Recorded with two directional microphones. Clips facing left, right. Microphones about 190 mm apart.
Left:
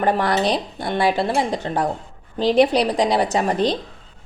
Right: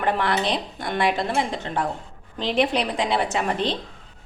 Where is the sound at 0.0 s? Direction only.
40° left (ahead or behind).